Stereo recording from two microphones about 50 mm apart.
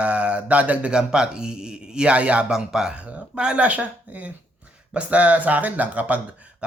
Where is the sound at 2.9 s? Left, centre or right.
Right.